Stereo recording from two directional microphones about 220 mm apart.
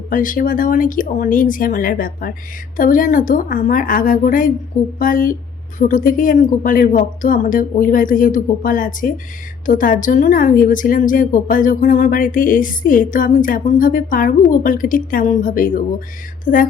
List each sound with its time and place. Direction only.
0.1 s a woman's voice: 40° left (ahead or behind)